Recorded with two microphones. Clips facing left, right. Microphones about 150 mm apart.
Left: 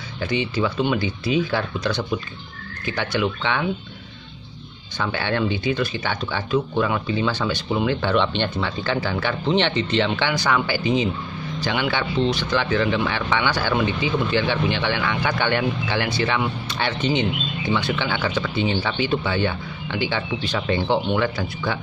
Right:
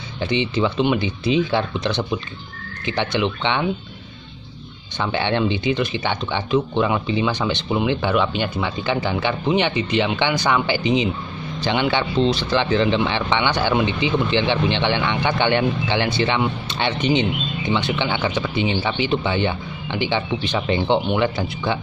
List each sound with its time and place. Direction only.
0.2 s speech: 25° right (ahead or behind)
4.9 s speech: 20° right (ahead or behind)